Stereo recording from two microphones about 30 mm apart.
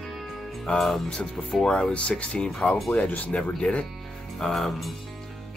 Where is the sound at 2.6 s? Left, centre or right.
Left.